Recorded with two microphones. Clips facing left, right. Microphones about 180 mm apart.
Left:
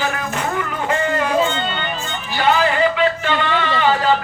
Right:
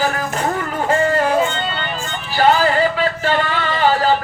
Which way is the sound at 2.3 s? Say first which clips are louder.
Right 3 dB; 40° right (ahead or behind).